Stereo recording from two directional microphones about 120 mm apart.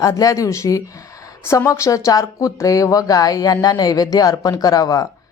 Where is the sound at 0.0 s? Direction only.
30° left (ahead or behind).